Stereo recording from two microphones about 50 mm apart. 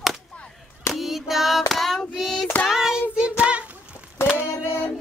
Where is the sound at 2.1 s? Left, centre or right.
Centre.